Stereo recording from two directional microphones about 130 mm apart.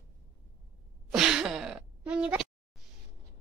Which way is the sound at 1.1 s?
5° right (ahead or behind).